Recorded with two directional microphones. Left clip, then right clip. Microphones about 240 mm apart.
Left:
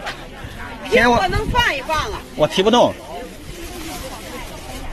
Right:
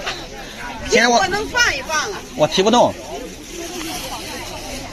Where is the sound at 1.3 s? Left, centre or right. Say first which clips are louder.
Right 1 dB; left.